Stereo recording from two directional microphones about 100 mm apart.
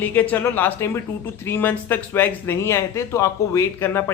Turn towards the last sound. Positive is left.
turn(degrees=25)  # may be behind; listen again after turning